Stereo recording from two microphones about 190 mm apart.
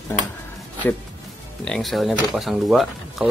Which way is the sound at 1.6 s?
Centre (ahead or behind).